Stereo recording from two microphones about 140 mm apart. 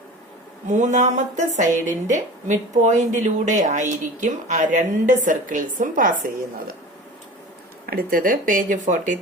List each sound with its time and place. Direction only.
0.7 s speech: 60° right (ahead or behind); by 6.7 s 80° right
7.9 s speech: 90° right; by 9.1 s 65° right (ahead or behind)